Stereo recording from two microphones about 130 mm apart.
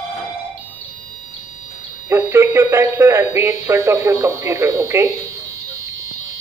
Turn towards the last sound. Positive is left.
turn(degrees=-20)  # may be behind; listen again after turning